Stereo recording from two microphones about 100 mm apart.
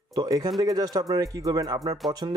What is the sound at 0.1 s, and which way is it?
Speech, 40° right (ahead or behind).